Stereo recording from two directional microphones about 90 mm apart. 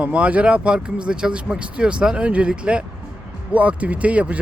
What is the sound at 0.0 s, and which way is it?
Speech, 15° right (ahead or behind).